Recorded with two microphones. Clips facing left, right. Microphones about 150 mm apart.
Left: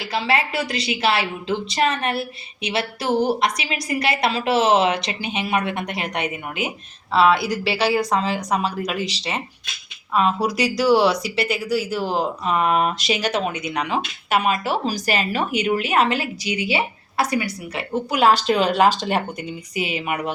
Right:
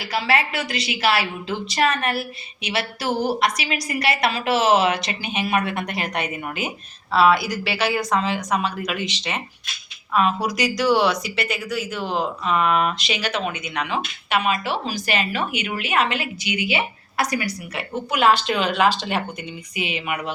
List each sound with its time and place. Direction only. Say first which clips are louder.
0.0 s a woman's voice: even; 25° left (ahead or behind)